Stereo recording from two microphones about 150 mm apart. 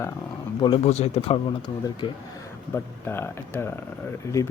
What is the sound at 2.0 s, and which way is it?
Speech, 30° left (ahead or behind).